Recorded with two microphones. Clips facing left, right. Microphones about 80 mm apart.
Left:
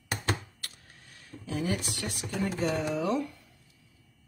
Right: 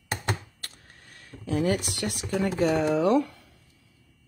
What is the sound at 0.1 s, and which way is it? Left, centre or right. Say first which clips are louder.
Computer keyboard: right 1 dB; right.